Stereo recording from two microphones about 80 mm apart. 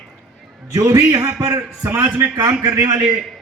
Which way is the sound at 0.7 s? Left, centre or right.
Right.